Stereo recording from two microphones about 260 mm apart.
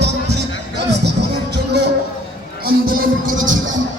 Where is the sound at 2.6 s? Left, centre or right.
Right.